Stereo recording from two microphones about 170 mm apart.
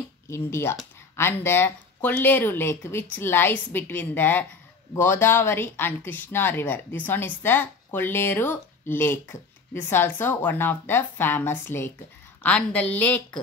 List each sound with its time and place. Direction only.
0.3 s speech: 15° left (ahead or behind)